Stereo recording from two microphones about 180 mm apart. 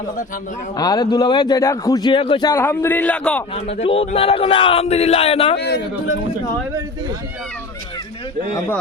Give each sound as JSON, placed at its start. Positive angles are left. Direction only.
{"t": 0.8, "sound": "a man's voice", "side_deg": 20}
{"t": 2.5, "sound": "a man's voice", "side_deg": 15}
{"t": 3.5, "sound": "speech", "side_deg": 35}
{"t": 5.5, "sound": "a man's voice", "side_deg": 65}